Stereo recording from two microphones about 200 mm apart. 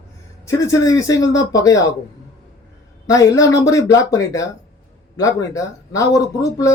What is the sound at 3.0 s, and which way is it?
Speech, 15° left (ahead or behind).